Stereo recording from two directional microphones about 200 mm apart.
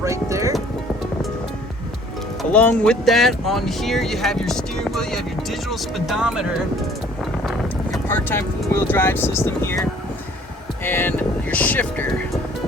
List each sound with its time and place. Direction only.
0.0 s music: 15° right (ahead or behind)
2.4 s speech: 5° left (ahead or behind)
7.4 s boat: centre (ahead or behind)
8.0 s speech: 10° left (ahead or behind)
10.8 s speech: 10° left (ahead or behind)